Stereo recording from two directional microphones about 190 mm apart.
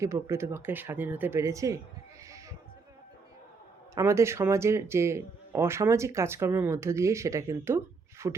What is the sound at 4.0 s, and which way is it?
Speech, 15° right (ahead or behind).